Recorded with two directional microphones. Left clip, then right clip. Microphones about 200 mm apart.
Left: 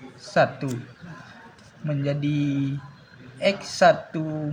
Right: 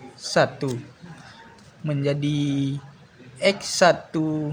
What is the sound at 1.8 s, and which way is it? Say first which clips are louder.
Speech: right 2 dB; 30° right (ahead or behind).